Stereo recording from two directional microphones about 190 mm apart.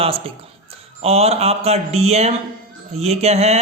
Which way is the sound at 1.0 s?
30° right (ahead or behind).